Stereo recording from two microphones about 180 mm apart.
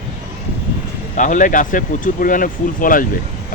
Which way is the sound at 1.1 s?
45° left (ahead or behind).